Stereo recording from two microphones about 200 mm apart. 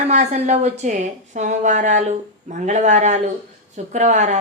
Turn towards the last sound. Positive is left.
turn(degrees=-35)  # may be behind; listen again after turning